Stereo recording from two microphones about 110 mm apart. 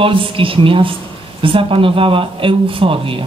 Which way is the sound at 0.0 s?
55° right (ahead or behind).